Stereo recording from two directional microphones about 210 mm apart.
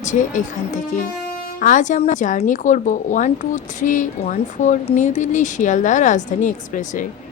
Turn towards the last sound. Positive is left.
turn(degrees=35)  # may be behind; listen again after turning